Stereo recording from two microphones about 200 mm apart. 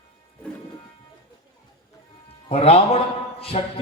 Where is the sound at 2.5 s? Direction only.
30° left (ahead or behind).